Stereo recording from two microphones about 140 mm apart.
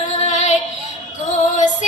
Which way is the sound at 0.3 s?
60° left (ahead or behind).